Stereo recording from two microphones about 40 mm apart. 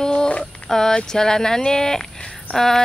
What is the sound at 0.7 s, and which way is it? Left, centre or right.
Speech, centre.